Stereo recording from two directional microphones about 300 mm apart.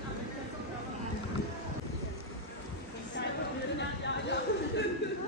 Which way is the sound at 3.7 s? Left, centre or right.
Left.